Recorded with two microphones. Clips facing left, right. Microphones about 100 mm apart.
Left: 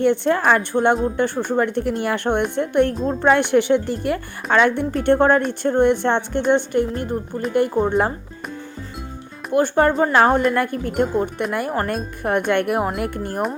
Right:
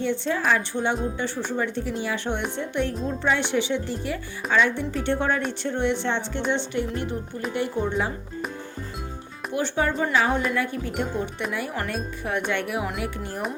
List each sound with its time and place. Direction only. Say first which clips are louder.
0.0 s speech: left 8 dB; 55° left (ahead or behind)
9.5 s speech: left 8 dB; 55° left (ahead or behind)